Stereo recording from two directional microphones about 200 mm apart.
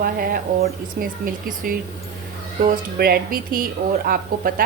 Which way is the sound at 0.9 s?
45° right (ahead or behind).